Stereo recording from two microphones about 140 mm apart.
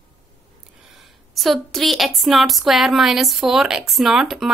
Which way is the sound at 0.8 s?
Centre (ahead or behind).